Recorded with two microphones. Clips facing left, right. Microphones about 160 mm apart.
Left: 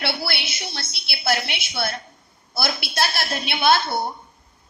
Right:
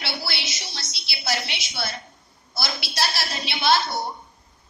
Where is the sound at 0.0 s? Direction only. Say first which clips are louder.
Left 5 dB; 55° left (ahead or behind).